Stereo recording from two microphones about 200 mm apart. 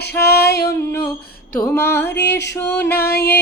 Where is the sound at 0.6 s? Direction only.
15° left (ahead or behind).